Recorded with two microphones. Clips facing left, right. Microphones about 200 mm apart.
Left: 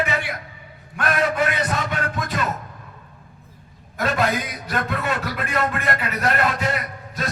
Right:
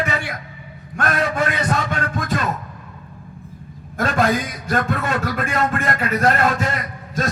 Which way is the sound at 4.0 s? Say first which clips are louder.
Right 3 dB; 45° right (ahead or behind).